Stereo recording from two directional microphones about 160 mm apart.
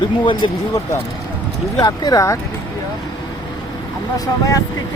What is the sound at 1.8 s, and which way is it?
Speech, 25° left (ahead or behind).